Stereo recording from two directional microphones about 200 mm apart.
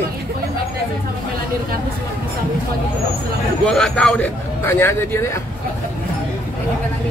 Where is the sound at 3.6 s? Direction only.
5° left (ahead or behind).